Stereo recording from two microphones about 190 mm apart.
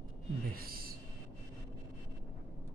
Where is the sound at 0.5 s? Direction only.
50° right (ahead or behind).